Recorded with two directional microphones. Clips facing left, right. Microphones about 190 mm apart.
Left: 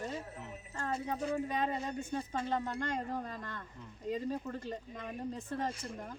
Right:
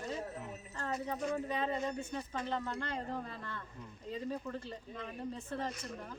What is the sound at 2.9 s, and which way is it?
Speech, 45° left (ahead or behind).